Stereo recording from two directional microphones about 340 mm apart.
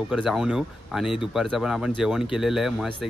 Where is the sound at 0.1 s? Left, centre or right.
Centre.